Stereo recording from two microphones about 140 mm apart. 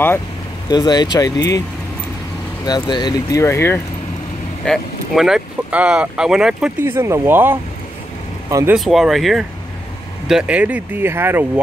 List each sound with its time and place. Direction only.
0.7 s speech: 30° left (ahead or behind)
2.6 s speech: 30° left (ahead or behind)
4.6 s speech: centre (ahead or behind)
6.8 s speech: 20° right (ahead or behind)
8.7 s speech: centre (ahead or behind)